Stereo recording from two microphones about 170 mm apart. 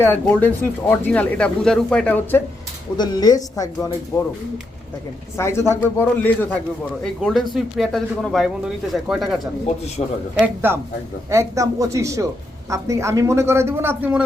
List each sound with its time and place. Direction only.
0.0 s speech: 10° left (ahead or behind)
3.0 s speech: 25° left (ahead or behind)
5.4 s speech: 15° left (ahead or behind); by 9.5 s centre (ahead or behind)
10.0 s a man's voice: 40° left (ahead or behind)
10.4 s a woman's voice: 10° right (ahead or behind)